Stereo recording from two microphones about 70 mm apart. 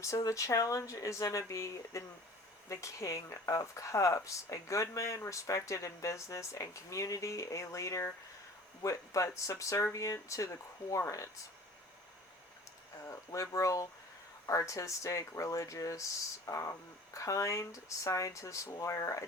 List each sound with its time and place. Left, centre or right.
0.2 s speech: left
13.1 s speech: left